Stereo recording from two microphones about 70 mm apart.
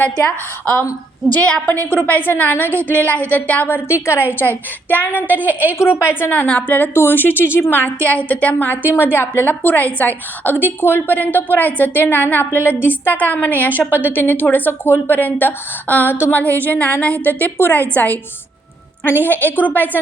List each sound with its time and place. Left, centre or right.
0.0 s a woman's voice: left
5.3 s a woman's voice: right
5.7 s a woman's voice: left
6.5 s a woman's voice: centre
19.2 s a woman's voice: left